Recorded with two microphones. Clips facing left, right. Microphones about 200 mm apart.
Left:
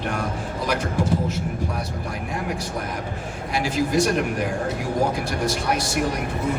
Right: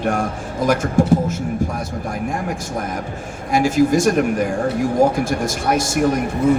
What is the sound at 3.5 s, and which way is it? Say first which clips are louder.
Speech: right 7 dB; 45° right (ahead or behind).